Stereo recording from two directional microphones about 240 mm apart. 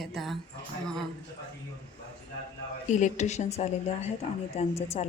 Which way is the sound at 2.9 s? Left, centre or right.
Left.